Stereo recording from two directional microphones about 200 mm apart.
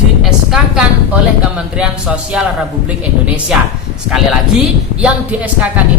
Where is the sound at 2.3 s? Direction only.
5° right (ahead or behind).